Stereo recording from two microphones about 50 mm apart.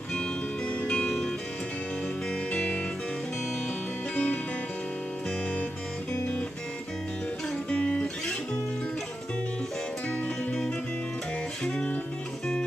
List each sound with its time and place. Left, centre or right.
0.1 s music: left
2.5 s music: centre
4.1 s music: left
7.7 s music: left
10.0 s music: left
11.6 s music: centre